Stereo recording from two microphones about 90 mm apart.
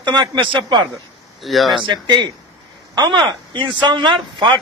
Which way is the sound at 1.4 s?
Centre (ahead or behind).